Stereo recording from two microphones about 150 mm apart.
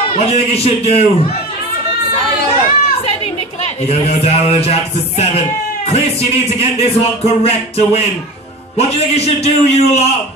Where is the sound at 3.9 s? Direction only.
45° left (ahead or behind).